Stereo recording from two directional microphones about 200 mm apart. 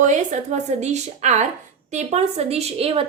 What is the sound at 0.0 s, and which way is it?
A woman's voice, 40° right (ahead or behind).